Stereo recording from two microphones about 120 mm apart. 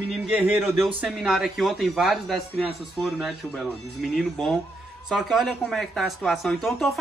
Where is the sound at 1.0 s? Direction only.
5° right (ahead or behind).